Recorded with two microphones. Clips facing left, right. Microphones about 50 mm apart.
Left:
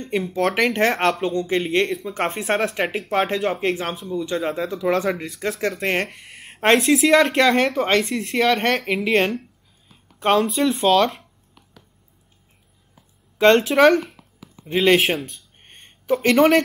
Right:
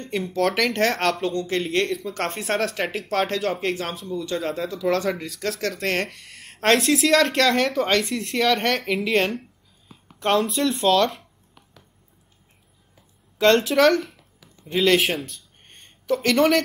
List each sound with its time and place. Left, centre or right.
0.1 s speech: left
1.9 s speech: centre
5.6 s speech: centre
8.0 s speech: centre
9.1 s speech: centre
10.1 s a sound: centre
10.5 s speech: centre
11.1 s a sound: centre
13.4 s a woman's voice: left
15.6 s a sound: left